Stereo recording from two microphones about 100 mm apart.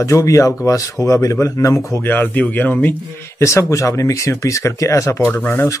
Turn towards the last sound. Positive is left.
turn(degrees=25)  # may be behind; listen again after turning